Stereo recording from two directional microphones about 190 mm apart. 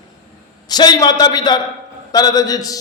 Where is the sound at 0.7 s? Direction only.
20° left (ahead or behind).